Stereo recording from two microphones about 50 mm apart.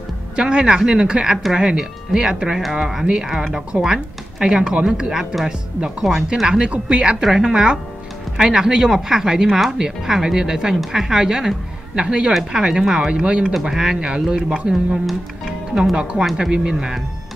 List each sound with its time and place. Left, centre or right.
0.4 s speech: centre
5.9 s speech: centre
13.5 s speech: centre
13.9 s speech: centre